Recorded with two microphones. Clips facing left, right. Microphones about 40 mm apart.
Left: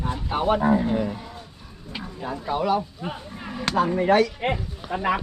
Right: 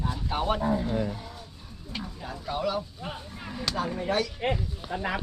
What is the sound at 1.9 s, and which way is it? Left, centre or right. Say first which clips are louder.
Speech: left 5 dB; left.